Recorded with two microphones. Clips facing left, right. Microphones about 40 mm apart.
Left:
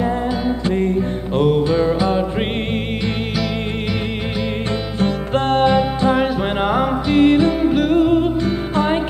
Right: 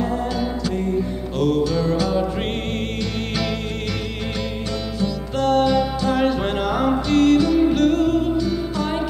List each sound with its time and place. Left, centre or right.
1.3 s music: left
4.9 s music: left
8.7 s music: left